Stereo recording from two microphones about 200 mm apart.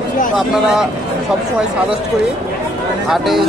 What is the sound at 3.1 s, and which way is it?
Speech, centre (ahead or behind).